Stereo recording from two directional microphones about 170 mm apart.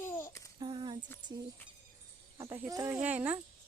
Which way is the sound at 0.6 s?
25° right (ahead or behind).